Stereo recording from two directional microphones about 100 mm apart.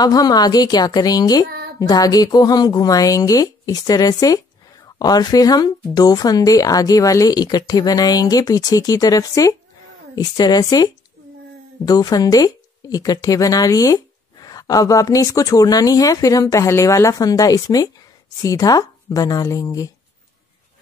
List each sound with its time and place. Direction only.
0.0 s a woman's voice: 40° left (ahead or behind)